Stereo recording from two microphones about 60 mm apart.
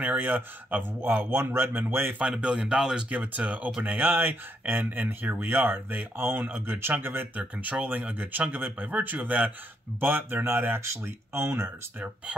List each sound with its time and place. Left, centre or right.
0.0 s speech: right
2.1 s speech: centre
3.1 s speech: right